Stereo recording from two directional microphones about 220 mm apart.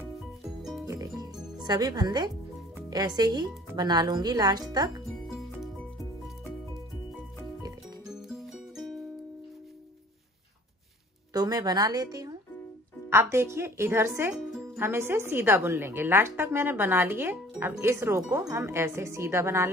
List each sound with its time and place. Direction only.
0.6 s music: centre (ahead or behind)
0.8 s music: 15° right (ahead or behind)
2.9 s speech: 20° right (ahead or behind)
8.1 s music: centre (ahead or behind)
11.3 s a woman's voice: 15° right (ahead or behind)